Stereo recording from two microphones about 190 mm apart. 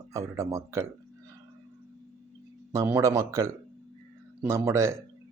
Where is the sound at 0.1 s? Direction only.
15° right (ahead or behind).